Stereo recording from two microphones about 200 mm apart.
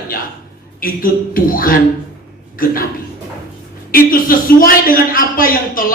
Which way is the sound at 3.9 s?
45° left (ahead or behind).